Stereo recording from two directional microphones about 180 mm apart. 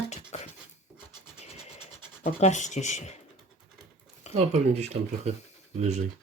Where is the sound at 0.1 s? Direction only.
40° left (ahead or behind).